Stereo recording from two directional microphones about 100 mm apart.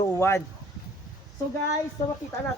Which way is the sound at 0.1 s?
25° left (ahead or behind).